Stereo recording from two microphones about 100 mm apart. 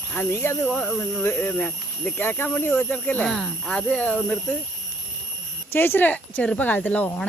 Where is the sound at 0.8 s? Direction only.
5° left (ahead or behind).